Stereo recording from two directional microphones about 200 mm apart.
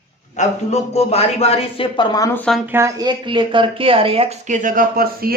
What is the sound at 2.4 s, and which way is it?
Speech, centre (ahead or behind).